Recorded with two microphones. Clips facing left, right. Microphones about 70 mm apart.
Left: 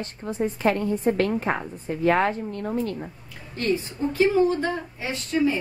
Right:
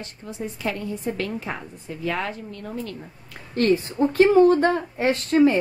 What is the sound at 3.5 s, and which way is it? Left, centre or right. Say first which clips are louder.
A woman's voice: right 5 dB; right.